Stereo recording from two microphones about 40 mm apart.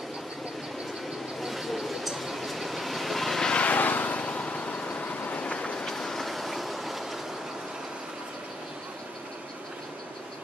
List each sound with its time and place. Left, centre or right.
1.4 s vehicle: centre
3.6 s vehicle: left
5.5 s vehicle: left
5.9 s train: centre